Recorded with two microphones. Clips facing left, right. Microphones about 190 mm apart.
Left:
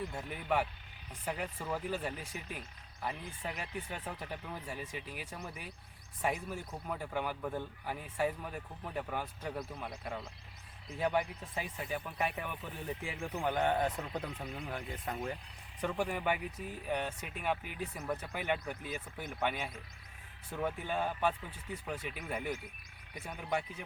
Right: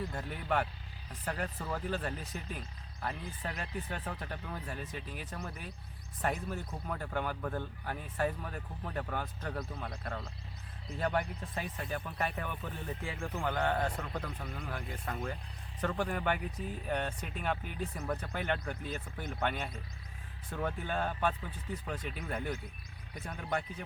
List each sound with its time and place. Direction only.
0.1 s speech: 5° left (ahead or behind)